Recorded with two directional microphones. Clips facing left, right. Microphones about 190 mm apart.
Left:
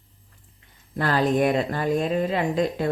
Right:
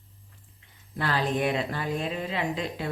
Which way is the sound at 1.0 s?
45° left (ahead or behind).